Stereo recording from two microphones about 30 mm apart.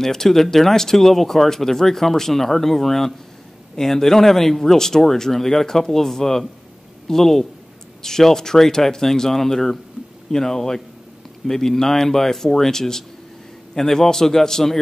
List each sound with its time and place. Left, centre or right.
0.0 s speech: centre